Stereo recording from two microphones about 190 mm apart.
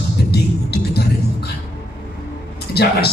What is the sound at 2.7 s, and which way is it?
Speech, 55° left (ahead or behind).